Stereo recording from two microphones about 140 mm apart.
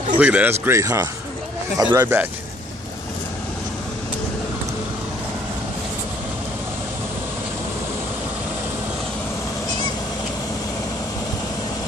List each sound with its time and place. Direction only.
0.2 s speech: 10° right (ahead or behind); by 2.1 s 25° right (ahead or behind)